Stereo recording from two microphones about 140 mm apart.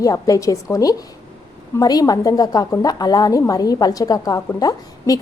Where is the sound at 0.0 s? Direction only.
25° left (ahead or behind).